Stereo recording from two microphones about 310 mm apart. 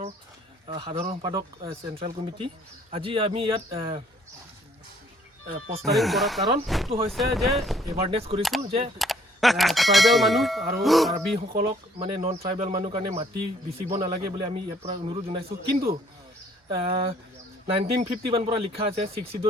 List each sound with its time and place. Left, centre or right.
0.7 s speech: centre
5.5 s speech: right
5.8 s speech: centre
7.9 s speech: centre
8.4 s speech: centre
11.1 s speech: centre